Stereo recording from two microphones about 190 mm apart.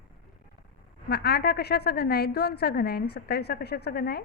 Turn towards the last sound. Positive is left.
turn(degrees=55)  # may be behind; listen again after turning